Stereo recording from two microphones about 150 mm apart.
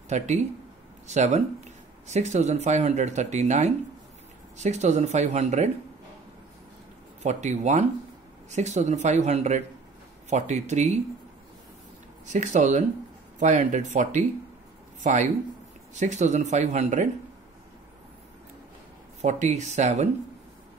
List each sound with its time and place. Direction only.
0.1 s speech: 50° right (ahead or behind)
7.2 s speech: 50° right (ahead or behind)
12.3 s speech: 50° right (ahead or behind)
19.2 s speech: 55° right (ahead or behind)